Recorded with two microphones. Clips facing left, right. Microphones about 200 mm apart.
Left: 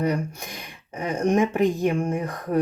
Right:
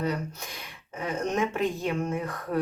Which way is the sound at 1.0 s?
15° left (ahead or behind).